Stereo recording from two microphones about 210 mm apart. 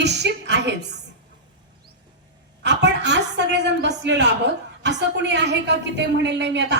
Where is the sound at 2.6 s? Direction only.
55° right (ahead or behind).